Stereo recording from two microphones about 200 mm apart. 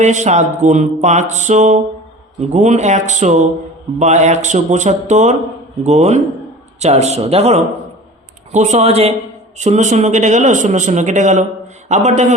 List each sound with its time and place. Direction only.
0.0 s speech: 35° right (ahead or behind)